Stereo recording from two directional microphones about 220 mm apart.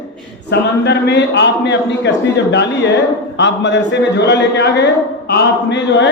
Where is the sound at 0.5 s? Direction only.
50° left (ahead or behind).